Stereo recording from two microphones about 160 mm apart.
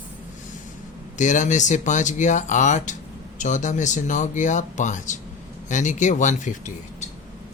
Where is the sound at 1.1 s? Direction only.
50° left (ahead or behind).